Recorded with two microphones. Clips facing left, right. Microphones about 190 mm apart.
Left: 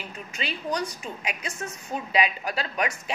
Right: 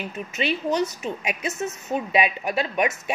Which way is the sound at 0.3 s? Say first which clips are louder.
Right 6 dB; 25° right (ahead or behind).